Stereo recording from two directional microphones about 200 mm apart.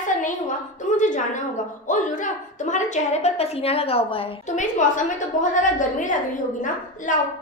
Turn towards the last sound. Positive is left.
turn(degrees=40)  # may be behind; listen again after turning